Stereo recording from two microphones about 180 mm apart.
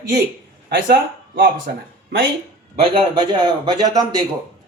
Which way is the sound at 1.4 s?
55° right (ahead or behind).